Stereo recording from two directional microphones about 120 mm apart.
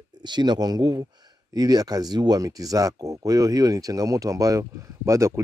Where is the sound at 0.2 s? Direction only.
35° right (ahead or behind).